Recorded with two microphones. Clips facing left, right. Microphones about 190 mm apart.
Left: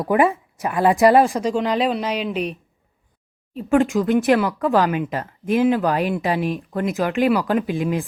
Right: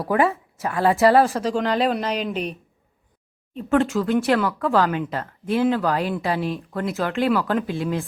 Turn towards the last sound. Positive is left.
turn(degrees=15)  # may be behind; listen again after turning